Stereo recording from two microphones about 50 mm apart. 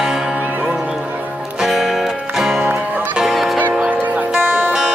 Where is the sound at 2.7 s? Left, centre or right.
Right.